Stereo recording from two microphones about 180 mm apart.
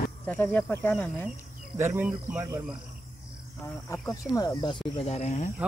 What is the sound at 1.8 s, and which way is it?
Speech, 10° right (ahead or behind).